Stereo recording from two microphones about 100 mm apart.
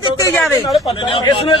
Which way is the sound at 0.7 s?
65° left (ahead or behind).